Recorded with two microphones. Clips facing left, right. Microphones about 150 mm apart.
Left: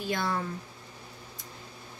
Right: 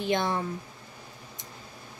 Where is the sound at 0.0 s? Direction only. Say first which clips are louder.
Right 4 dB; 20° right (ahead or behind).